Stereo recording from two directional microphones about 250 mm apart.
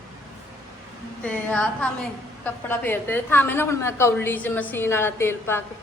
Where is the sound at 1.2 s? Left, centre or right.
Centre.